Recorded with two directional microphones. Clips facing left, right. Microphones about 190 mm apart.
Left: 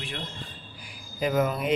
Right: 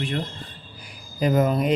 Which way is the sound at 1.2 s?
40° right (ahead or behind).